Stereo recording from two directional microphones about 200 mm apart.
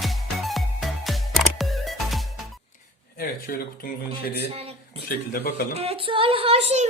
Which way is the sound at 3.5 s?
45° left (ahead or behind).